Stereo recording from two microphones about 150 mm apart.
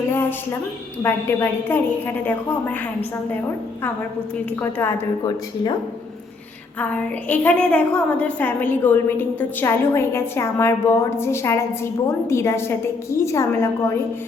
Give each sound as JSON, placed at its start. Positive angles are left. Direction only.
{"t": 0.1, "sound": "a sound", "side_deg": 15}
{"t": 1.0, "sound": "a woman's voice", "side_deg": 15}
{"t": 4.6, "sound": "a woman's voice", "side_deg": 15}
{"t": 6.7, "sound": "a woman's voice", "side_deg": 10}